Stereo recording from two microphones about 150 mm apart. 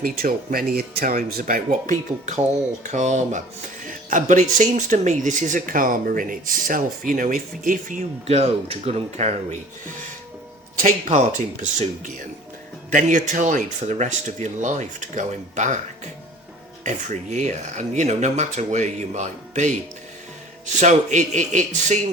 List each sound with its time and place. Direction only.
0.0 s speech: 75° right (ahead or behind)
8.4 s speech: 40° right (ahead or behind)
11.6 s speech: 55° right (ahead or behind)
16.8 s speech: 50° right (ahead or behind)
20.7 s speech: 55° right (ahead or behind)